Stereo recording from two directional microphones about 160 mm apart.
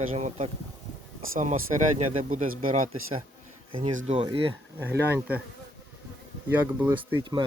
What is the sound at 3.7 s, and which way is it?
Speech, 35° right (ahead or behind).